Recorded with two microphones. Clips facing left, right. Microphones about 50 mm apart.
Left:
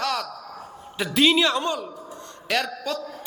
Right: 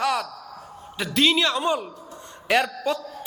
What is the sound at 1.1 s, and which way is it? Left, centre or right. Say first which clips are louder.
Speech: left 1 dB; centre.